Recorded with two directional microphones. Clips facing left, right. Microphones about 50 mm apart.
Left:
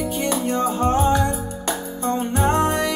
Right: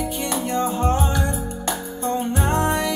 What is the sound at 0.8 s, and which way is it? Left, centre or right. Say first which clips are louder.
Music: left 3 dB; left.